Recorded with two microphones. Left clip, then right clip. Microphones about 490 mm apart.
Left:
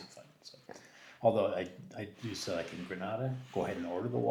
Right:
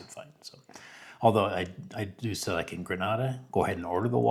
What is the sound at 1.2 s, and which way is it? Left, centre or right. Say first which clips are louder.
Speech: right 5 dB; right.